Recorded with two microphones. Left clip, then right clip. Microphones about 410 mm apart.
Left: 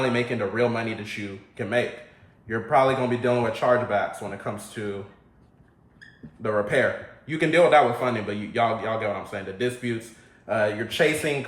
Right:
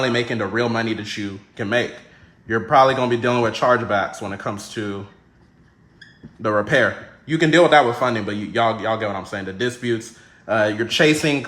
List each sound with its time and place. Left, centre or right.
0.0 s a man's voice: centre
6.4 s a man's voice: right